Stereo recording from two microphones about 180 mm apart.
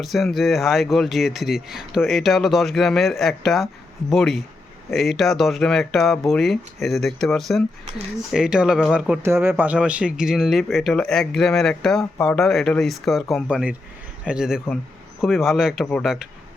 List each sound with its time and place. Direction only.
0.0 s speech: centre (ahead or behind)
9.2 s speech: 15° right (ahead or behind)